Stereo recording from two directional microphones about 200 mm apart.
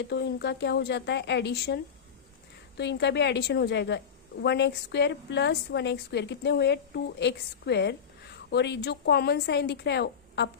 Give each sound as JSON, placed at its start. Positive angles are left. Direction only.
{"t": 0.1, "sound": "a woman's voice", "side_deg": 55}